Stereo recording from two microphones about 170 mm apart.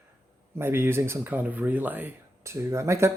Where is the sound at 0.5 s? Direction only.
15° right (ahead or behind).